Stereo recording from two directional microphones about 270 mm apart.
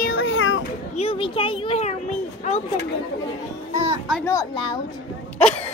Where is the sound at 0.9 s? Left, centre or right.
Centre.